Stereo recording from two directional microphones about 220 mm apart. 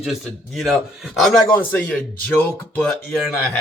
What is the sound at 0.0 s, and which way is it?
A man's voice, centre (ahead or behind).